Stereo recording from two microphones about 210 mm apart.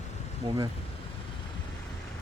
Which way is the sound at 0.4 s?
20° right (ahead or behind).